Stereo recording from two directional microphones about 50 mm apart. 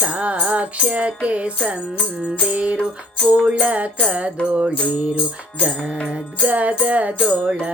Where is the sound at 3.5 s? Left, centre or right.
Right.